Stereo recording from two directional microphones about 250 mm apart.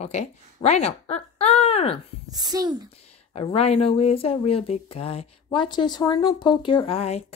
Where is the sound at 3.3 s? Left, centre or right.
Left.